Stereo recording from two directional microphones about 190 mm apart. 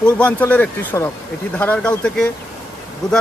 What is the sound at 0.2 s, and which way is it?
Speech, 10° left (ahead or behind).